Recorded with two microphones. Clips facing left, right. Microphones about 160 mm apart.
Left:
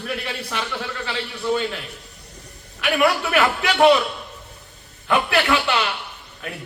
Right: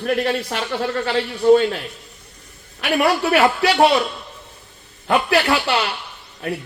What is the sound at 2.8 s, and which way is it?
Speech, 35° right (ahead or behind).